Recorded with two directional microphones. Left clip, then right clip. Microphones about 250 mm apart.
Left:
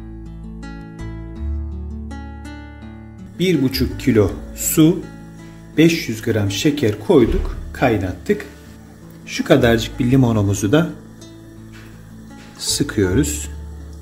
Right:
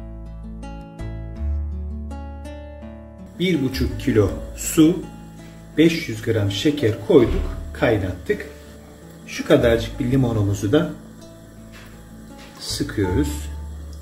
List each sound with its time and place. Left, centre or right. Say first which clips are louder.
3.3 s speech: left 4 dB; left
5.8 s speech: left 2 dB; left
12.5 s speech: left 5 dB; left